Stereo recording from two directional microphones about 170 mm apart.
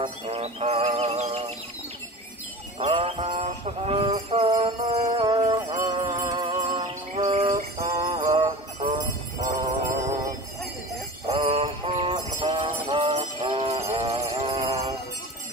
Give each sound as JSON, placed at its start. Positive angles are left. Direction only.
{"t": 0.0, "sound": "music", "side_deg": -40}
{"t": 2.8, "sound": "jingle bell", "side_deg": -35}
{"t": 5.2, "sound": "music", "side_deg": -25}
{"t": 7.9, "sound": "jingle bell", "side_deg": -30}
{"t": 11.2, "sound": "jingle bell", "side_deg": -35}